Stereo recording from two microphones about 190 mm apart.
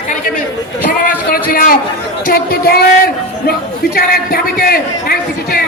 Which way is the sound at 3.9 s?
50° left (ahead or behind).